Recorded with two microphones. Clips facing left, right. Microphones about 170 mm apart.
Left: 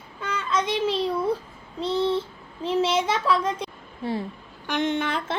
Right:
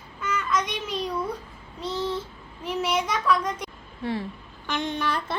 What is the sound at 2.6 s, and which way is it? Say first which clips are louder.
A child's voice: left 4 dB; 30° left (ahead or behind).